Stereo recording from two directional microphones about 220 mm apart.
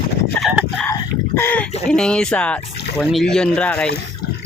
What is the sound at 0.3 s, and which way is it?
Fowl, centre (ahead or behind).